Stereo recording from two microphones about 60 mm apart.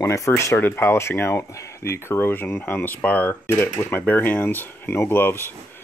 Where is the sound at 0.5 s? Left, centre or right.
Left.